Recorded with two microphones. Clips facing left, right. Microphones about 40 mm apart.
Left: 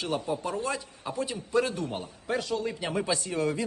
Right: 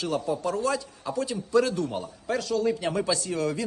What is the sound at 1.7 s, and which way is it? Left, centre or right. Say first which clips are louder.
Speech: right 4 dB; left.